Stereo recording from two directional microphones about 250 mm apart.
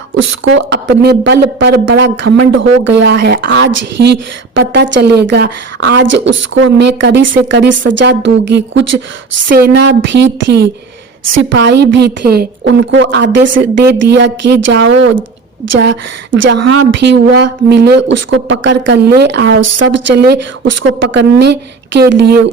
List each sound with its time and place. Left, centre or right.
0.1 s speech: right
9.5 s speech: right